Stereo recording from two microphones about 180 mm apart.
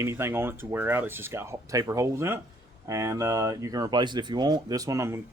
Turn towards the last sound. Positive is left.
turn(degrees=-15)  # may be behind; listen again after turning